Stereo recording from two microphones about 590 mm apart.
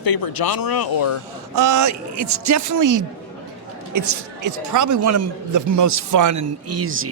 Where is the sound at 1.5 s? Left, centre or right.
Right.